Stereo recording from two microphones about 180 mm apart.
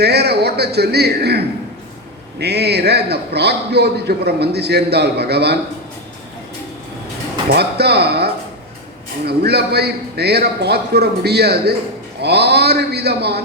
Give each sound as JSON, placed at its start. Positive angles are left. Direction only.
{"t": 0.0, "sound": "a man's voice", "side_deg": -65}
{"t": 7.5, "sound": "a man's voice", "side_deg": -65}